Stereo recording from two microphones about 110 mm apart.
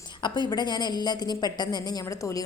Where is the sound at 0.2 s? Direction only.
45° left (ahead or behind).